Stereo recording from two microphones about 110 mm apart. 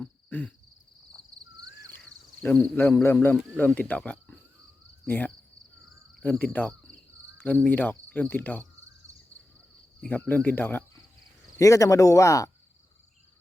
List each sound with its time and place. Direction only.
0.0 s cricket: 15° left (ahead or behind)
2.4 s speech: 15° left (ahead or behind)
6.4 s speech: 15° left (ahead or behind)
10.0 s speech: 15° left (ahead or behind)
11.5 s speech: 30° left (ahead or behind)